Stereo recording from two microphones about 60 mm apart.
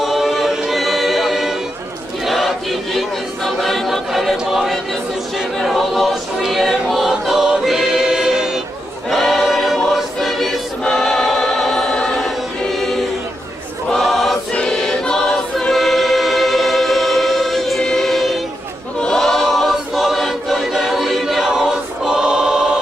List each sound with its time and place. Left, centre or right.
0.0 s a capella: centre
2.2 s choir: centre
9.0 s choir: centre
13.9 s choir: centre